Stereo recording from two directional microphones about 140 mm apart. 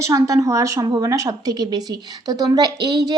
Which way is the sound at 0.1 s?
25° right (ahead or behind).